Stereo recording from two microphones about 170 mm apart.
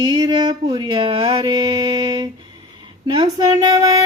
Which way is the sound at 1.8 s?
20° right (ahead or behind).